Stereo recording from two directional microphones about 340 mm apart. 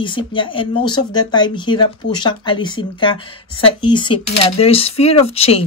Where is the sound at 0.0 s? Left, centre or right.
Centre.